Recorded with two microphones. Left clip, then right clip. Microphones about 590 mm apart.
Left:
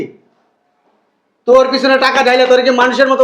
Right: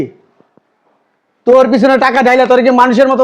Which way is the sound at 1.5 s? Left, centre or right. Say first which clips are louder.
Right 2 dB; right.